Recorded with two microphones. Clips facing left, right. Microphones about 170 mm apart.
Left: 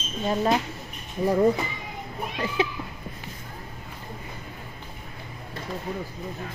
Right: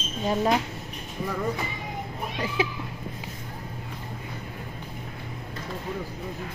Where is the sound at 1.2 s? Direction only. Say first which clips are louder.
Left 9 dB; 35° left (ahead or behind).